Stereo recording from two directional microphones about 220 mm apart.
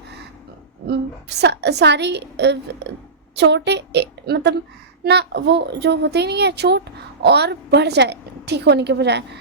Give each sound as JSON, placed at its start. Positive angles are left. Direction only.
{"t": 0.9, "sound": "a woman's voice", "side_deg": -50}